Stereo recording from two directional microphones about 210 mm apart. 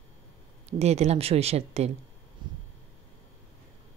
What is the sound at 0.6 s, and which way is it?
Speech, 30° right (ahead or behind).